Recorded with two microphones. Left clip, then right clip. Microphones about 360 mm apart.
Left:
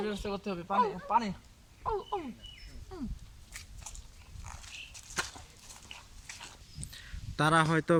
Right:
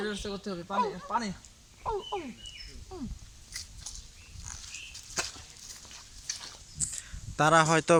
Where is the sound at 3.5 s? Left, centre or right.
Centre.